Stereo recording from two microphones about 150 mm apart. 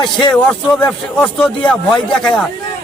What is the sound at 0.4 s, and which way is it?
Speech, 10° left (ahead or behind).